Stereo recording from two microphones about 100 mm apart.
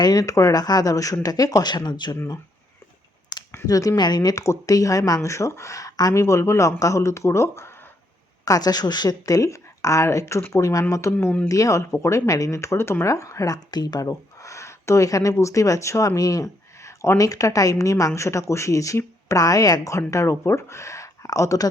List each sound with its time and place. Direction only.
0.0 s speech: 40° left (ahead or behind)
2.1 s speech: 35° left (ahead or behind)
3.3 s a sound: 45° left (ahead or behind)
3.7 s speech: 35° left (ahead or behind)
8.4 s speech: 40° left (ahead or behind)